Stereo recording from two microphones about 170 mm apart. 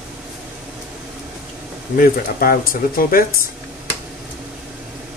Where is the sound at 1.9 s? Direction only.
60° left (ahead or behind).